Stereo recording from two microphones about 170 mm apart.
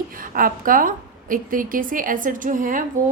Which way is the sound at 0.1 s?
55° right (ahead or behind).